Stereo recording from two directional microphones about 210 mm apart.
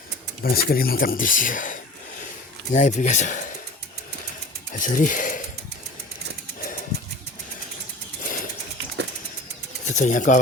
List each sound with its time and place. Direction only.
0.4 s speech: 45° left (ahead or behind)
4.7 s speech: 40° left (ahead or behind)
8.2 s a sound: 40° left (ahead or behind)
9.8 s speech: 35° left (ahead or behind)